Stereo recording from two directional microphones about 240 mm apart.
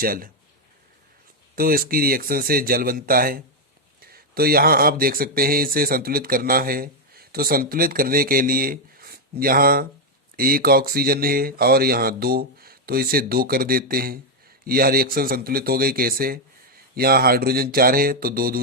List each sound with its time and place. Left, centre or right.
0.0 s speech: right
1.5 s speech: right